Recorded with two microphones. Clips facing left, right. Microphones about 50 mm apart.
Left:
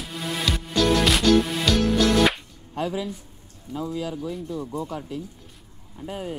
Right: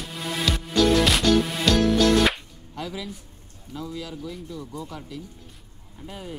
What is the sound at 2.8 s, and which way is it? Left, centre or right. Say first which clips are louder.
Speech: left 6 dB; left.